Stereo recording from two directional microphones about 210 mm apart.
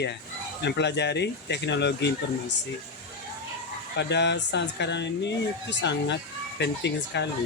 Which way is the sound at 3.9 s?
55° left (ahead or behind).